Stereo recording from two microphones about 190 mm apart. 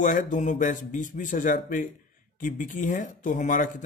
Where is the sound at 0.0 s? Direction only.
40° left (ahead or behind).